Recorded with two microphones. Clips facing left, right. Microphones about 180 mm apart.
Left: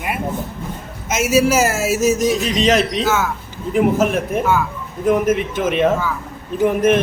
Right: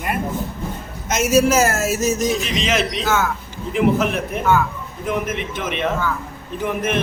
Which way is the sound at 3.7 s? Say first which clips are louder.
Left 2 dB; 45° left (ahead or behind).